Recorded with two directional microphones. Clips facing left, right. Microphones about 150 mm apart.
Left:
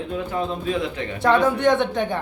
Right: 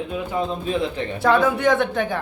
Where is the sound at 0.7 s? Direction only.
30° right (ahead or behind).